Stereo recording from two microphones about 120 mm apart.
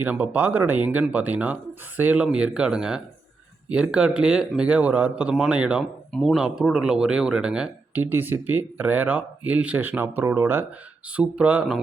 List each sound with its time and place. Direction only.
0.0 s speech: 15° right (ahead or behind)
6.1 s speech: centre (ahead or behind)